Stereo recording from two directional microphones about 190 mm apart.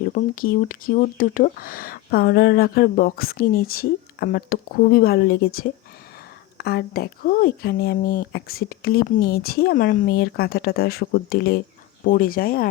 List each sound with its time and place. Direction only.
0.0 s speech: 50° left (ahead or behind)